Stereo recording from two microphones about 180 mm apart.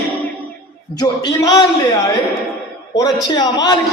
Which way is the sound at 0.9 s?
20° left (ahead or behind).